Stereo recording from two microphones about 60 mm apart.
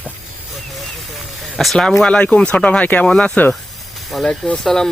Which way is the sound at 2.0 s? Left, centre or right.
Left.